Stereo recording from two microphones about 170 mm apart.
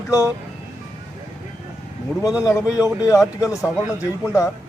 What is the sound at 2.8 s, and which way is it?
Speech, 20° left (ahead or behind).